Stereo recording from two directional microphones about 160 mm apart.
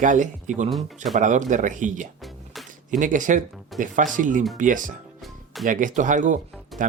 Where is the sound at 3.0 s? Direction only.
55° right (ahead or behind).